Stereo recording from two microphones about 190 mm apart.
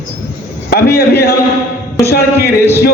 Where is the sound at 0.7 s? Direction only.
55° left (ahead or behind).